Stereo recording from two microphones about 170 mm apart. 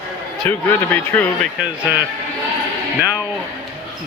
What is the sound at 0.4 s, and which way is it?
Speech, 10° left (ahead or behind).